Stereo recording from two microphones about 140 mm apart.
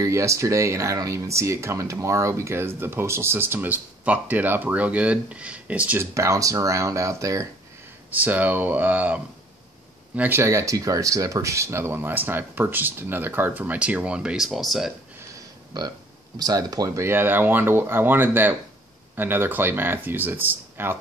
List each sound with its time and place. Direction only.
0.0 s speech: 20° right (ahead or behind)
6.1 s speech: 20° right (ahead or behind); by 14.9 s centre (ahead or behind)
15.3 s a sound: 30° right (ahead or behind)
16.3 s speech: 25° right (ahead or behind)